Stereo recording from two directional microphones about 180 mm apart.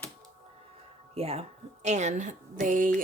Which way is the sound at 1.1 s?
35° right (ahead or behind).